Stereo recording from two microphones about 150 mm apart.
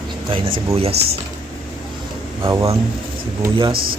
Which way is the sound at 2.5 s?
20° right (ahead or behind).